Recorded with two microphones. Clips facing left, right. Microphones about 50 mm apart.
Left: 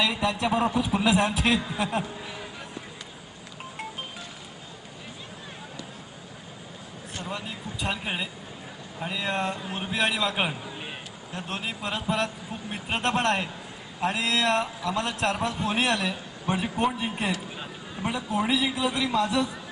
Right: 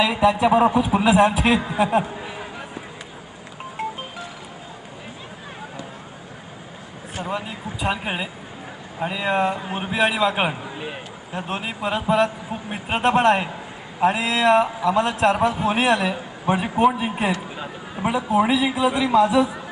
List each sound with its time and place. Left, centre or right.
0.0 s a man's voice: centre
2.0 s speech: right
7.2 s a man's voice: centre
10.3 s a sound: centre
11.3 s a man's voice: centre